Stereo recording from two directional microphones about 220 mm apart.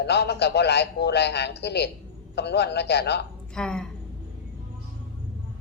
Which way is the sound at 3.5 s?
5° left (ahead or behind).